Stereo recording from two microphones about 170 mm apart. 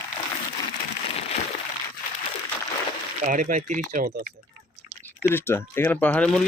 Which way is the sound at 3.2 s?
50° right (ahead or behind).